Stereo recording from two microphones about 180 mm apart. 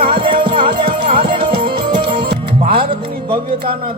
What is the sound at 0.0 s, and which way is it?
Music, 30° right (ahead or behind).